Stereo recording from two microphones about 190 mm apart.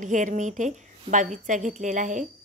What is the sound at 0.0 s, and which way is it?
A woman's voice, 40° right (ahead or behind).